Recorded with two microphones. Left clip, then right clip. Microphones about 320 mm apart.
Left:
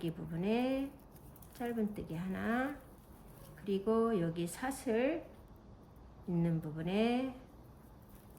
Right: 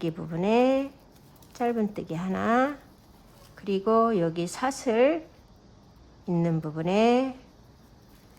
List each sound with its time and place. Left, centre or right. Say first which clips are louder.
0.0 s speech: right 11 dB; centre
6.4 s speech: right 11 dB; centre